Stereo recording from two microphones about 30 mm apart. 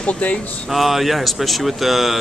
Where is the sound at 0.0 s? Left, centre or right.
Left.